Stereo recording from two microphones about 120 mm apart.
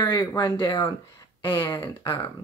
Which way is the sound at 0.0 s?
35° left (ahead or behind).